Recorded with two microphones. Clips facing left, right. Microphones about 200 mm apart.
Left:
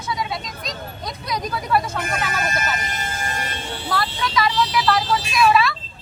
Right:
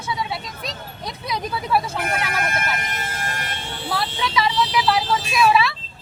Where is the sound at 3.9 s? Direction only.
5° right (ahead or behind).